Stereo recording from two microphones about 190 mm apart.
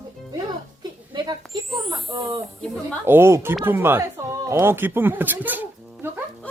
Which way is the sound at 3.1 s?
15° right (ahead or behind).